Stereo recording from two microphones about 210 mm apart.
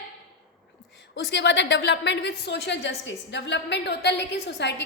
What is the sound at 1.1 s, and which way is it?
A woman's voice, 60° left (ahead or behind).